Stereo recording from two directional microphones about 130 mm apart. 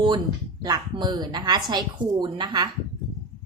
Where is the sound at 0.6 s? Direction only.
35° right (ahead or behind).